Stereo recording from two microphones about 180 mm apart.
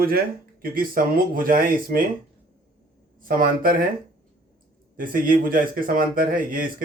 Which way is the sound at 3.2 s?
50° right (ahead or behind).